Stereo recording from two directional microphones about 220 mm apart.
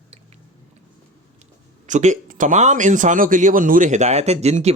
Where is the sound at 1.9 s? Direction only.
35° right (ahead or behind).